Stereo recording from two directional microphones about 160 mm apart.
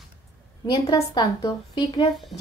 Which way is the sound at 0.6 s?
25° left (ahead or behind).